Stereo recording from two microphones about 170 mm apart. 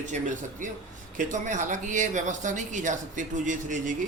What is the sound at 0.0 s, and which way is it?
Speech, 45° right (ahead or behind).